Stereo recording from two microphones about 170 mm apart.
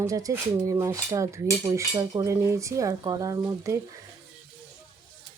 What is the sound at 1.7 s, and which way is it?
Cutlery, 20° right (ahead or behind).